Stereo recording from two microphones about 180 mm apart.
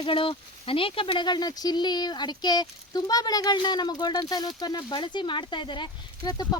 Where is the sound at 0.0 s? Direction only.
30° left (ahead or behind).